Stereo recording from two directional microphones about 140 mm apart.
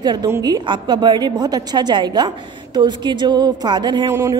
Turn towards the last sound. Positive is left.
turn(degrees=-25)  # may be behind; listen again after turning